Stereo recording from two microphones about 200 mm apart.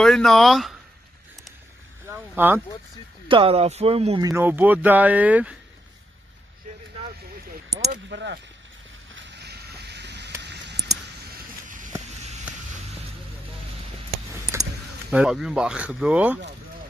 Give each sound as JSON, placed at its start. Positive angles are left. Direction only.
{"t": 0.0, "sound": "speech", "side_deg": 0}
{"t": 2.0, "sound": "a sound", "side_deg": -10}
{"t": 3.3, "sound": "speech", "side_deg": -25}
{"t": 4.2, "sound": "speech", "side_deg": -10}
{"t": 8.1, "sound": "speech", "side_deg": -55}
{"t": 9.1, "sound": "a sound", "side_deg": -55}
{"t": 15.0, "sound": "speech", "side_deg": -5}